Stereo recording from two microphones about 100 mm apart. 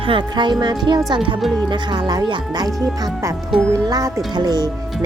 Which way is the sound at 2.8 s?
35° right (ahead or behind).